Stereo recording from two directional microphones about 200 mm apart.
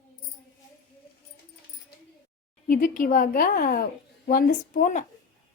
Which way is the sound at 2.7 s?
45° left (ahead or behind).